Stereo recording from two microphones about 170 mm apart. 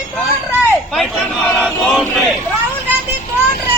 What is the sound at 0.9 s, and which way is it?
Speech, centre (ahead or behind).